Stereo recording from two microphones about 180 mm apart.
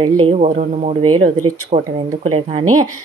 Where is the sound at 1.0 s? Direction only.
25° right (ahead or behind).